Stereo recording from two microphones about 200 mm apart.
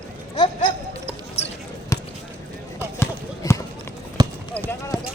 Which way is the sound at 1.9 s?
20° left (ahead or behind).